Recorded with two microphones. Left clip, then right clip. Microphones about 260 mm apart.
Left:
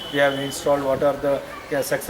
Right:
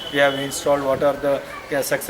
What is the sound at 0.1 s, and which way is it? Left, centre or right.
Speech, centre.